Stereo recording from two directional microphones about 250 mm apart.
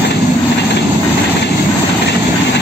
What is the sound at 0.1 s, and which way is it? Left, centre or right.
Vehicle, left.